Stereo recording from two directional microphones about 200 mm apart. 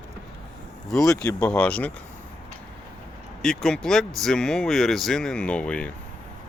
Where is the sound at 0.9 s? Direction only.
Centre (ahead or behind).